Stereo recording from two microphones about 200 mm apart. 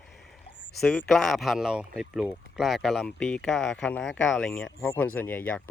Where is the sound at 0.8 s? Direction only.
5° left (ahead or behind).